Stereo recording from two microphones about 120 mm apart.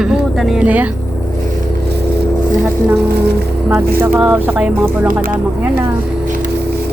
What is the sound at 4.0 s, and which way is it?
Speech, 15° right (ahead or behind).